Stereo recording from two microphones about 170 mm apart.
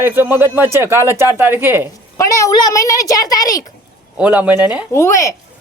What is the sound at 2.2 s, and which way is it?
A woman's voice, 20° left (ahead or behind).